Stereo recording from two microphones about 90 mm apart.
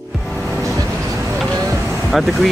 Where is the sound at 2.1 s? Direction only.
Centre (ahead or behind).